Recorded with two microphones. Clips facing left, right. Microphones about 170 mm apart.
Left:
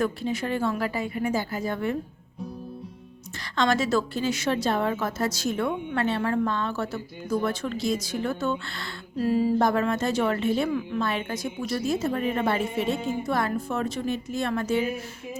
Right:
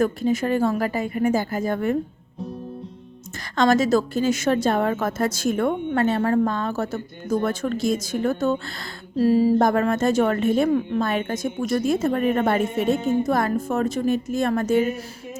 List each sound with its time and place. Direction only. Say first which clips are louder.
0.0 s a woman's voice: right 6 dB; 45° right (ahead or behind)
3.5 s a woman's voice: right 5 dB; 45° right (ahead or behind)